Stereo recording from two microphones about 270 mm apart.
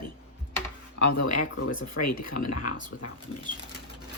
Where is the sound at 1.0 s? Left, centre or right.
Left.